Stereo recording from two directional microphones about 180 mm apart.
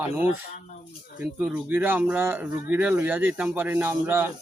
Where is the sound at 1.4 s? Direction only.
5° right (ahead or behind).